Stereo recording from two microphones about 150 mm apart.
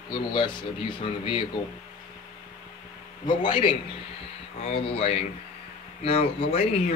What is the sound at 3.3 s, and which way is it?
Speech, 30° left (ahead or behind).